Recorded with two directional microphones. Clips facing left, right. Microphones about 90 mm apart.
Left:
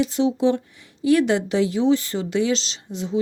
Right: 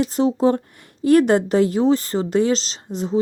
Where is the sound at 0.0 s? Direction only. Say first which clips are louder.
Right 2 dB; 40° right (ahead or behind).